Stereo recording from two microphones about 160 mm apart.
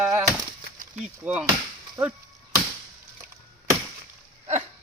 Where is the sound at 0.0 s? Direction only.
5° right (ahead or behind).